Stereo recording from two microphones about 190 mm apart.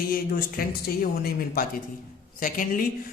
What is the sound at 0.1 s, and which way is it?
Speech, 50° left (ahead or behind).